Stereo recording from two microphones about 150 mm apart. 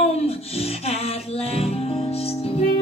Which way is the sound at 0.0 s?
45° left (ahead or behind).